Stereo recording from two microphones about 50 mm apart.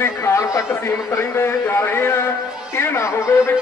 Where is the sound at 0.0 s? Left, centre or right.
Left.